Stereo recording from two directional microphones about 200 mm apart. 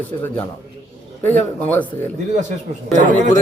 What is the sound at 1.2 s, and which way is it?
Speech, 10° left (ahead or behind).